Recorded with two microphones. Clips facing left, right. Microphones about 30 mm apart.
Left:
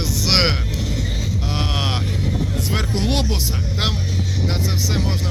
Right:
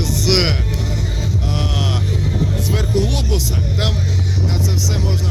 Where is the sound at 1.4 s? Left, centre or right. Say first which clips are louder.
Right 1 dB; left.